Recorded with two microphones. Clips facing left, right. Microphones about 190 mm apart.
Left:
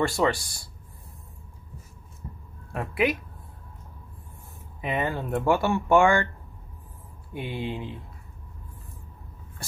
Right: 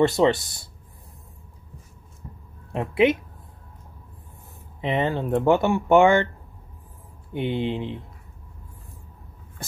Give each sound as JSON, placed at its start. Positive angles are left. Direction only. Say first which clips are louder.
{"t": 0.0, "sound": "speech", "louder": "right 5 dB", "side_deg": -20}
{"t": 2.2, "sound": "a sound", "louder": "left 1 dB", "side_deg": 0}
{"t": 2.7, "sound": "speech", "louder": "right 6 dB", "side_deg": -25}
{"t": 4.8, "sound": "speech", "louder": "right 4 dB", "side_deg": -20}
{"t": 7.3, "sound": "speech", "louder": "right 6 dB", "side_deg": -20}